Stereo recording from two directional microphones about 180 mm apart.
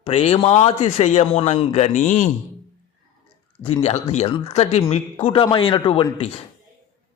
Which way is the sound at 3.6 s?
35° left (ahead or behind).